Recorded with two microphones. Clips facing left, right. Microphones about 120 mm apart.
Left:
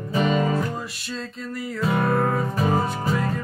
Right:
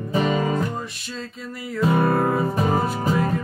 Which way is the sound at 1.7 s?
5° right (ahead or behind).